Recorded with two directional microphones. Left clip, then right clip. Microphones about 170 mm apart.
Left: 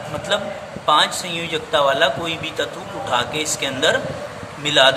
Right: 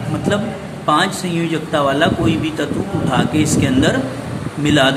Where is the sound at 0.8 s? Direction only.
15° left (ahead or behind).